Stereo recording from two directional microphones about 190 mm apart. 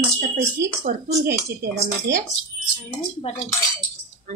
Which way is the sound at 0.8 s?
55° right (ahead or behind).